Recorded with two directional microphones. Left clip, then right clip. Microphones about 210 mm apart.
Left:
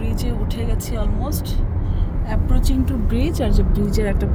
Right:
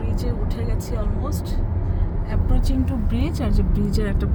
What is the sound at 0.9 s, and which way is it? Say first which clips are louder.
Speech: left 3 dB; 20° left (ahead or behind).